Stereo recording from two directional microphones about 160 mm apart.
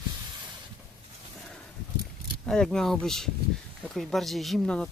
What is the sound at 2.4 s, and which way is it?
Speech, 5° left (ahead or behind).